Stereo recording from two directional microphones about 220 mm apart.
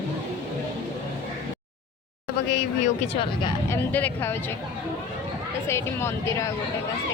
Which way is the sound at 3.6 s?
10° left (ahead or behind).